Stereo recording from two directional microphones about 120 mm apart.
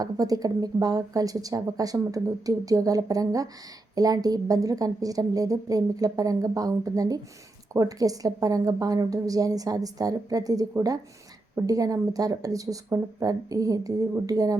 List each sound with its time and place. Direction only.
0.0 s a woman's voice: 30° right (ahead or behind)